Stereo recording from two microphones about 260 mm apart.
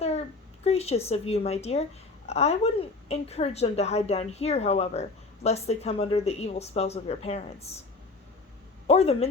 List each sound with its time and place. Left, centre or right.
0.6 s a woman's voice: left
8.9 s a woman's voice: left